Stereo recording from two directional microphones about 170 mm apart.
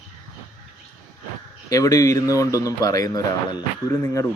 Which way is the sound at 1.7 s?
20° left (ahead or behind).